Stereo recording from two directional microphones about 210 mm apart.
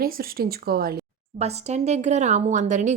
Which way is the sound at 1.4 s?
30° right (ahead or behind).